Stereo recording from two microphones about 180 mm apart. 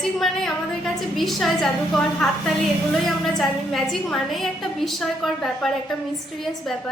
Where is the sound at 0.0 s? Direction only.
Centre (ahead or behind).